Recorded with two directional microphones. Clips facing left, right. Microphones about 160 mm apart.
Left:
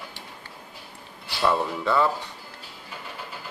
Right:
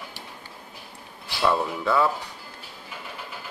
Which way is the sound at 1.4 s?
Centre (ahead or behind).